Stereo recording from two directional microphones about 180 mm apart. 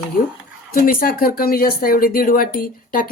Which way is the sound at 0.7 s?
55° left (ahead or behind).